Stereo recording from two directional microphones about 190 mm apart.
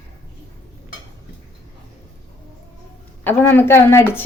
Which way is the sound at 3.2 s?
10° left (ahead or behind).